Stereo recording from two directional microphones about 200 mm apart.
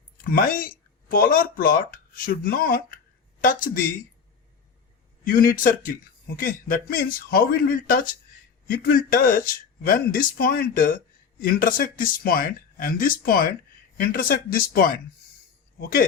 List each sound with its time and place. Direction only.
0.3 s a man's voice: 45° left (ahead or behind)
5.2 s a man's voice: 45° left (ahead or behind)